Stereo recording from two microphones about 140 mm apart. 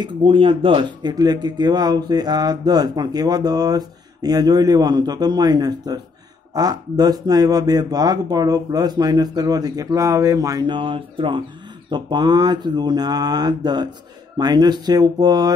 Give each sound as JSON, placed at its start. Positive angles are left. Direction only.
{"t": 0.0, "sound": "speech", "side_deg": -35}